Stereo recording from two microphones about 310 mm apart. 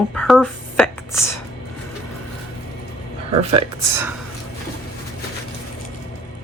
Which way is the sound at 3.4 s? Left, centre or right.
Centre.